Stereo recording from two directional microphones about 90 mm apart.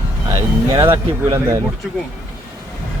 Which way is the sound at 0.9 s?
30° right (ahead or behind).